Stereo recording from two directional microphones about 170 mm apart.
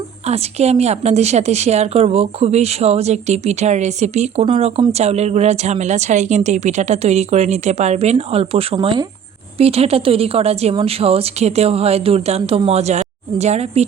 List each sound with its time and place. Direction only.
0.3 s a woman's voice: 40° right (ahead or behind)